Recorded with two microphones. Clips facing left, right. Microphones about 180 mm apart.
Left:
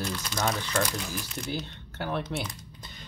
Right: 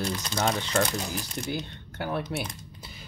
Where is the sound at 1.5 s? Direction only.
15° right (ahead or behind).